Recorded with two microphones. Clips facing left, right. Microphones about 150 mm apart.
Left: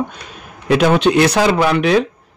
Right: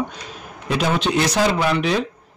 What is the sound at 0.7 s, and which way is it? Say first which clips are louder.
Speech: left 8 dB; 65° left (ahead or behind).